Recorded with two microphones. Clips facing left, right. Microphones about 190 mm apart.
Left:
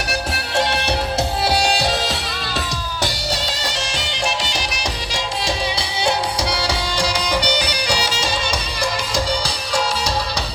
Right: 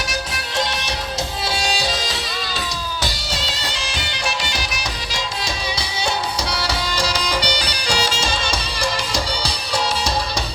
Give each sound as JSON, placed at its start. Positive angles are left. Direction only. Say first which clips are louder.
{"t": 0.1, "sound": "music", "louder": "left 4 dB", "side_deg": 60}
{"t": 6.6, "sound": "music", "louder": "left 1 dB", "side_deg": 25}